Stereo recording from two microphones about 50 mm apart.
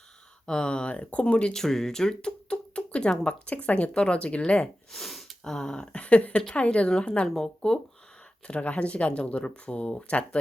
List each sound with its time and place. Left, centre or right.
0.4 s speech: centre
1.6 s a sound: centre
3.2 s speech: left
4.9 s a sound: centre
5.5 s speech: centre
7.3 s speech: centre
8.4 s speech: left